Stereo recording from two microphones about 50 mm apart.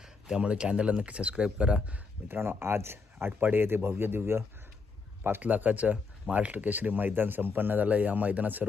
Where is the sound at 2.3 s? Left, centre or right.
Right.